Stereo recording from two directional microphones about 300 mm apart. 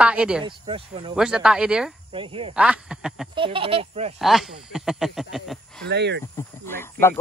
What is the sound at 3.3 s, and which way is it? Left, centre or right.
Speech, centre.